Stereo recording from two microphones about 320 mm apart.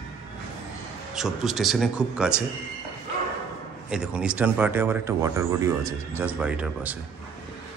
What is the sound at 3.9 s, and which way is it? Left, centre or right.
Speech, centre.